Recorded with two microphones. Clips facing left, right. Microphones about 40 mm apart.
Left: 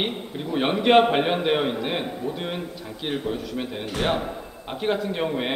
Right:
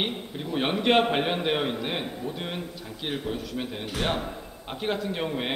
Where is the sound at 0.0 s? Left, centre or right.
Centre.